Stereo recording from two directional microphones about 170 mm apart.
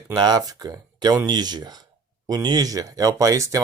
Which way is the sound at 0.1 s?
25° right (ahead or behind).